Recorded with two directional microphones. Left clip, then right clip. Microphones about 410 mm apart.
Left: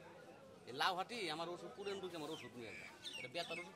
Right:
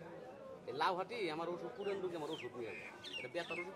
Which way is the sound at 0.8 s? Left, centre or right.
Left.